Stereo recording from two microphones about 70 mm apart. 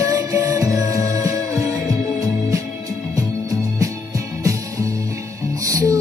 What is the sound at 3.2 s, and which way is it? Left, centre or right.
Music, right.